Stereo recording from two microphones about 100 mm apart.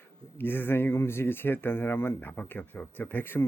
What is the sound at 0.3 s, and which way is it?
Speech, 20° left (ahead or behind).